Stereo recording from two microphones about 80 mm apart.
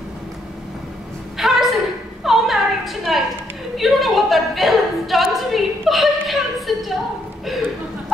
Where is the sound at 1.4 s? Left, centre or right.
Centre.